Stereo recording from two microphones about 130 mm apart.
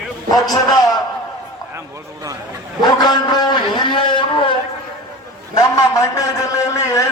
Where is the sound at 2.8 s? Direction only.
30° left (ahead or behind).